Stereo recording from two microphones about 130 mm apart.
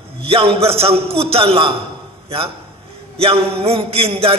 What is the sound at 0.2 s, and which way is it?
A man's voice, 50° right (ahead or behind).